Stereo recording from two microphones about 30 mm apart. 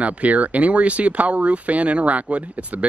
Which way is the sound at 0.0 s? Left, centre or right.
Right.